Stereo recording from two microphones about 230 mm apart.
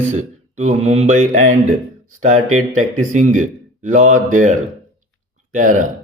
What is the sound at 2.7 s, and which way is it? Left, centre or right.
Speech, right.